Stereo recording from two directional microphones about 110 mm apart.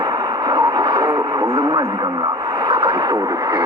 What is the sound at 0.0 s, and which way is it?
Speech, 40° right (ahead or behind).